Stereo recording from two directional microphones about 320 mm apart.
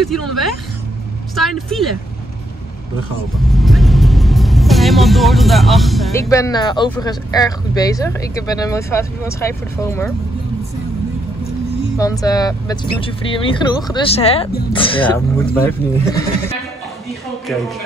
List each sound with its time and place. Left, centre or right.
0.0 s speech: centre
1.3 s speech: centre
3.5 s vehicle: centre
6.2 s speech: centre
12.0 s speech: centre